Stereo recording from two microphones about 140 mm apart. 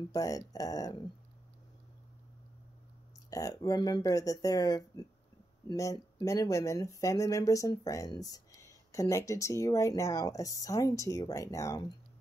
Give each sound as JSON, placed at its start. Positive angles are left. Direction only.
{"t": 0.1, "sound": "speech", "side_deg": 25}
{"t": 3.3, "sound": "speech", "side_deg": 25}